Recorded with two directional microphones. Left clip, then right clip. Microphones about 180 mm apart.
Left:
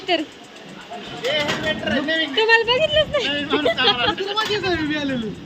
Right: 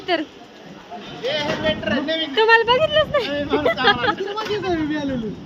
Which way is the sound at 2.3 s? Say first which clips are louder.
Right 3 dB; 15° right (ahead or behind).